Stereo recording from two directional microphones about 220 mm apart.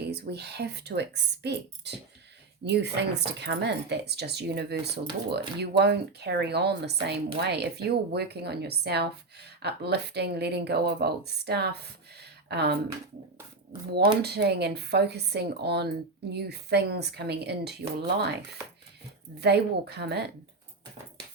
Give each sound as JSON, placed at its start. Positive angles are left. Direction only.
{"t": 0.0, "sound": "speech", "side_deg": -45}
{"t": 13.9, "sound": "speech", "side_deg": -45}
{"t": 19.4, "sound": "speech", "side_deg": -50}